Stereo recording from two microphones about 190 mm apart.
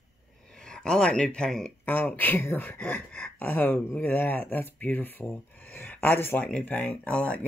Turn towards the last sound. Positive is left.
turn(degrees=5)  # may be behind; listen again after turning